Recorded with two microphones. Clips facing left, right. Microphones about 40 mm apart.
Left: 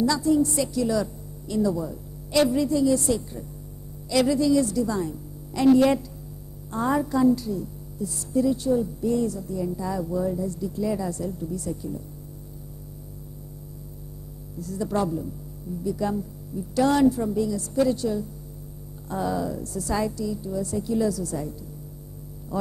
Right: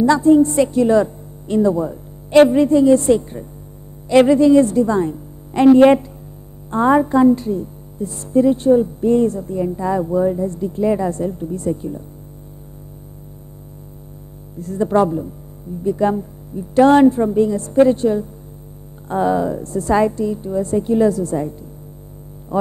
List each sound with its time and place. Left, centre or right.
0.0 s a woman's voice: right
14.6 s a woman's voice: right
22.5 s music: right